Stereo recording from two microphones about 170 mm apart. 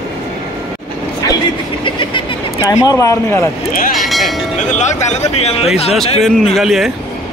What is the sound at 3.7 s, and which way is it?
Speech, 55° left (ahead or behind).